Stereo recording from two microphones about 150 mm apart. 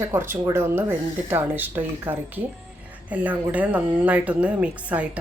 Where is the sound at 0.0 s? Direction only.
15° right (ahead or behind).